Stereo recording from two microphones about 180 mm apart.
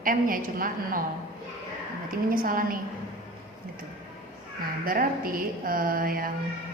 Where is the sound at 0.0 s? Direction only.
50° right (ahead or behind).